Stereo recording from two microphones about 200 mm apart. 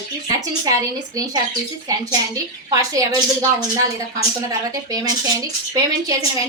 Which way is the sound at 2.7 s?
15° right (ahead or behind).